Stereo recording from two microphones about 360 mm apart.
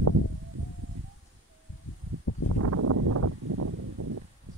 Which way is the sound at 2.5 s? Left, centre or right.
Right.